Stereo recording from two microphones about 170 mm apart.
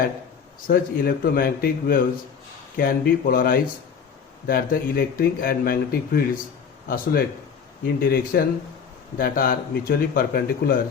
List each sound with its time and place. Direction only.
0.7 s speech: 60° left (ahead or behind)